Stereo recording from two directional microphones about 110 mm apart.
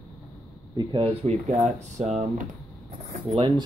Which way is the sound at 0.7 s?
50° right (ahead or behind).